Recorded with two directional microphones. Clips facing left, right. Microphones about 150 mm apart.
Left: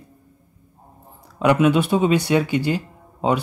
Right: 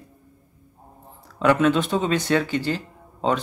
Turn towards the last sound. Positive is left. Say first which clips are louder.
# left 2 dB
turn(degrees=10)  # may be behind; listen again after turning